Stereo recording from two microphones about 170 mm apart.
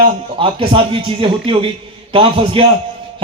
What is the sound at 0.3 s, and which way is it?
A man's voice, 30° right (ahead or behind).